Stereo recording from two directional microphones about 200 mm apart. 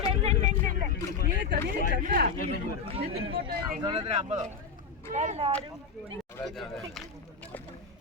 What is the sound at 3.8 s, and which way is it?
Speech, 30° right (ahead or behind).